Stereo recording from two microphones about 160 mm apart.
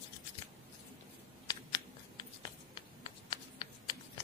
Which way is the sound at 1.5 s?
25° left (ahead or behind).